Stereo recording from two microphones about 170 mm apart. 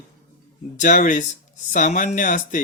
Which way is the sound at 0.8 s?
50° left (ahead or behind).